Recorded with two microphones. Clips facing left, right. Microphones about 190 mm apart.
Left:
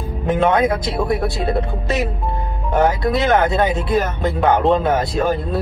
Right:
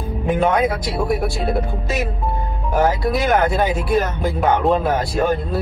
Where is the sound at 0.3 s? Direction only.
Centre (ahead or behind).